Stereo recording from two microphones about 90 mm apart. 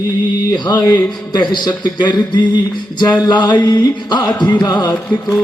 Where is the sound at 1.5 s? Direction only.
55° left (ahead or behind).